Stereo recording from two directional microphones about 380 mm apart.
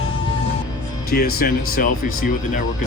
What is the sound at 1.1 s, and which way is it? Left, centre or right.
Speech, left.